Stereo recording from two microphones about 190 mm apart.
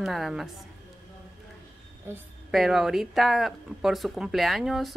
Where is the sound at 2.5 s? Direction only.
Centre (ahead or behind).